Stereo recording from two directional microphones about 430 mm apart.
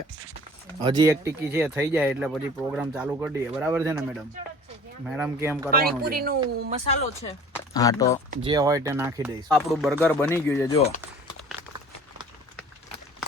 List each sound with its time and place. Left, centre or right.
0.9 s speech: centre
5.0 s speech: centre
5.7 s speech: right
6.8 s speech: centre
8.3 s speech: centre